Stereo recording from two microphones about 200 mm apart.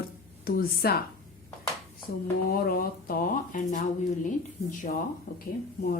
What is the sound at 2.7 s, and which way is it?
A woman's voice, 45° left (ahead or behind).